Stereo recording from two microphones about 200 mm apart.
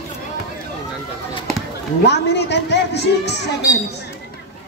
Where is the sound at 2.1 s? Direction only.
60° left (ahead or behind).